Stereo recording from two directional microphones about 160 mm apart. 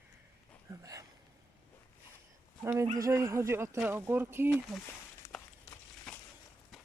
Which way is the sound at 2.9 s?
20° right (ahead or behind).